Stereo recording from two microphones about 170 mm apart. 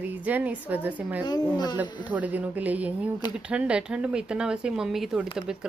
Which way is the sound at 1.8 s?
10° right (ahead or behind).